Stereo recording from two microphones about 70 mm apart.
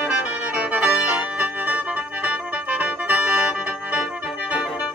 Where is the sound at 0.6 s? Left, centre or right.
Centre.